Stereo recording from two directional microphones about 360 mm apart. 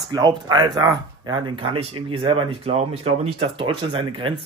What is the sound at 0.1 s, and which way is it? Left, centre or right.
Speech, centre.